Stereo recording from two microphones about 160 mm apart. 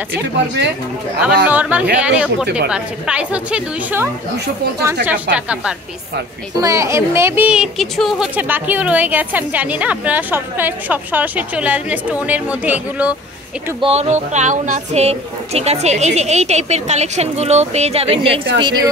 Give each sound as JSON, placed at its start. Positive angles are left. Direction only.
{"t": 1.4, "sound": "a woman's voice", "side_deg": -10}
{"t": 5.3, "sound": "a woman's voice", "side_deg": -5}
{"t": 6.6, "sound": "a woman's voice", "side_deg": -20}
{"t": 8.4, "sound": "a woman's voice", "side_deg": -10}
{"t": 13.7, "sound": "speech", "side_deg": -40}